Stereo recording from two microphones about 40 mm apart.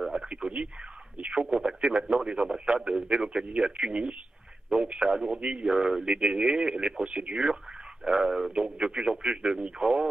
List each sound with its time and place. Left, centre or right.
0.3 s radio: right
1.1 s a man's voice: right
8.0 s a man's voice: centre